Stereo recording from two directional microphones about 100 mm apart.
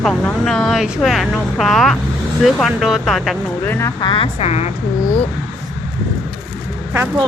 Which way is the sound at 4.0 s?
55° left (ahead or behind).